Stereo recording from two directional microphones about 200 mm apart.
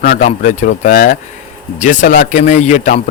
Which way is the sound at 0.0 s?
40° left (ahead or behind).